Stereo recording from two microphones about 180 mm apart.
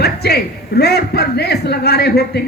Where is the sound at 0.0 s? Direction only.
65° left (ahead or behind).